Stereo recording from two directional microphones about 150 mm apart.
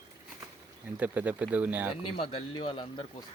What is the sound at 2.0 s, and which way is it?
Speech, 35° left (ahead or behind).